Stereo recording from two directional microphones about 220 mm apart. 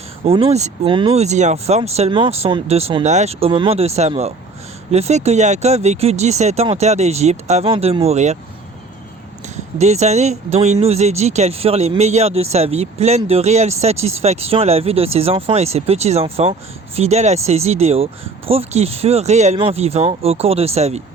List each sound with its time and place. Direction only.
0.3 s speech: 25° right (ahead or behind)
9.7 s speech: 30° right (ahead or behind)